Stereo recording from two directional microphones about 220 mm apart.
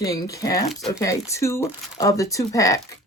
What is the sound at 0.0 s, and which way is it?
Speech, 15° left (ahead or behind).